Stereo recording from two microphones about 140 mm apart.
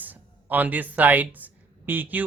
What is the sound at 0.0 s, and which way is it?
Speech, 10° right (ahead or behind).